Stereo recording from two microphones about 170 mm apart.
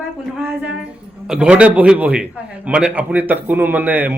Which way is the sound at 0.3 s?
5° right (ahead or behind).